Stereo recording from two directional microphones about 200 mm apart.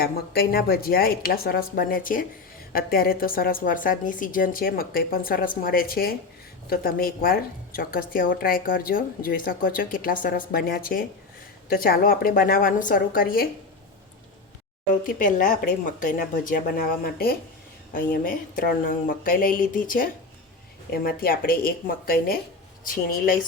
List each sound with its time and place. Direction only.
0.0 s a woman's voice: 50° left (ahead or behind)
15.0 s a woman's voice: 40° left (ahead or behind)